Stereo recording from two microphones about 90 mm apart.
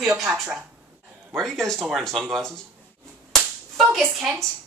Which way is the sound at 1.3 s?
5° left (ahead or behind).